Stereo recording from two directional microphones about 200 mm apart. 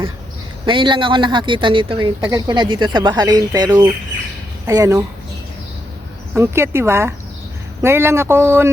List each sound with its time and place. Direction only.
0.6 s speech: 25° right (ahead or behind)
6.3 s speech: 15° right (ahead or behind)